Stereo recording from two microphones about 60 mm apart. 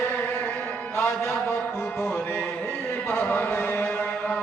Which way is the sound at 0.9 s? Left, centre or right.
Left.